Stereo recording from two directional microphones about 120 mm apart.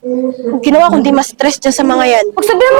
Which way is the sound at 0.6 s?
20° right (ahead or behind).